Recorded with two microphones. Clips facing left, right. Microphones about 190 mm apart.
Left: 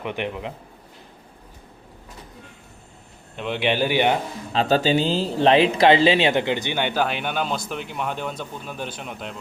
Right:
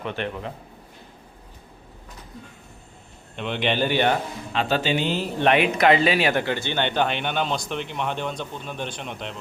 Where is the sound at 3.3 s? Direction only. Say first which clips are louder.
Left 1 dB; 5° left (ahead or behind).